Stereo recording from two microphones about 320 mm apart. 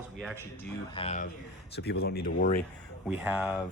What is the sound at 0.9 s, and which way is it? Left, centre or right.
Speech, left.